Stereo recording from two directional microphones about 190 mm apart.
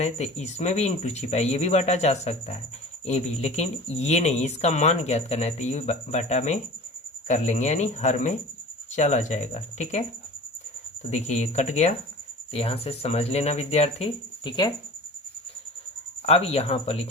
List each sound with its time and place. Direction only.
0.0 s speech: 35° left (ahead or behind)
11.1 s speech: 35° left (ahead or behind)
16.2 s speech: 30° left (ahead or behind)